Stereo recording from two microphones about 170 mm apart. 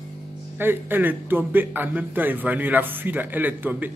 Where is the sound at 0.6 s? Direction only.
10° right (ahead or behind).